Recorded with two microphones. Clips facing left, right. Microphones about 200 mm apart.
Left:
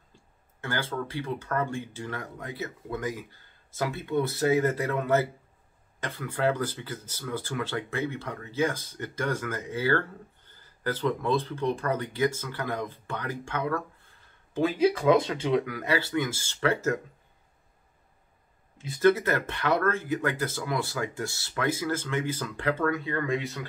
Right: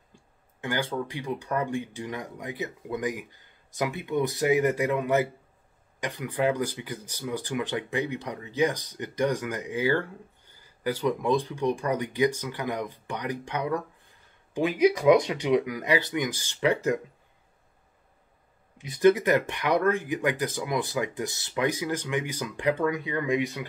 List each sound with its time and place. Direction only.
0.1 s speech: 15° right (ahead or behind)
18.9 s speech: 15° right (ahead or behind)